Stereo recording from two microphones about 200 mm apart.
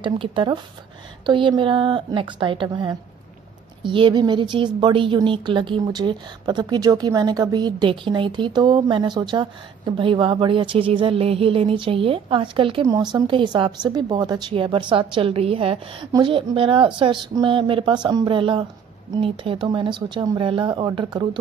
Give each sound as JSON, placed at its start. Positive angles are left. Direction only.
{"t": 0.0, "sound": "a woman's voice", "side_deg": -25}